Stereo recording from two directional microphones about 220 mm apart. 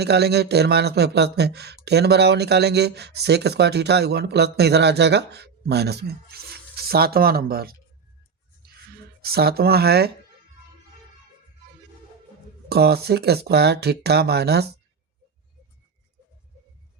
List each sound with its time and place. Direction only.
0.0 s speech: 50° right (ahead or behind)
9.2 s speech: 45° right (ahead or behind)
12.6 s speech: 45° right (ahead or behind)